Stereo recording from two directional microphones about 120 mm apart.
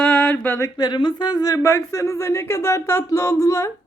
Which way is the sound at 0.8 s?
40° left (ahead or behind).